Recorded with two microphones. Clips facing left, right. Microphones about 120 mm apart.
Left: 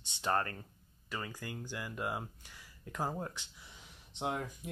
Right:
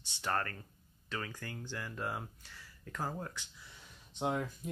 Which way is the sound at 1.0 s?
10° left (ahead or behind).